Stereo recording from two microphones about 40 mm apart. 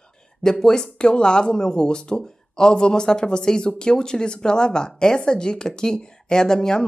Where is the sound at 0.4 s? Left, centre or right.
Centre.